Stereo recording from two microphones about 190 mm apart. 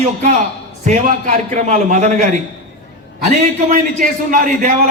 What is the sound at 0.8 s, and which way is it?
Speech, 40° right (ahead or behind).